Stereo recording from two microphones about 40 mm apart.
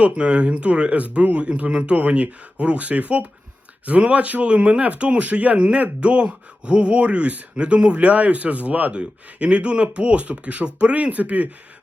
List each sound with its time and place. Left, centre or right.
0.0 s speech: right
8.9 s speech: right